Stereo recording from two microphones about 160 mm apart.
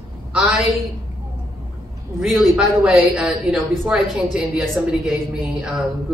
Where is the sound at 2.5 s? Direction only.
5° right (ahead or behind).